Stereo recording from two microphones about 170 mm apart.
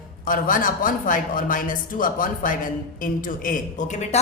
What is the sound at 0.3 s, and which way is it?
A woman's voice, 55° left (ahead or behind).